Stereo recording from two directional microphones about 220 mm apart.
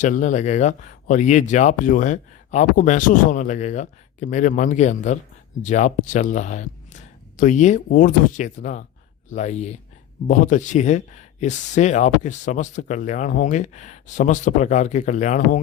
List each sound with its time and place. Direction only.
0.0 s speech: 35° left (ahead or behind)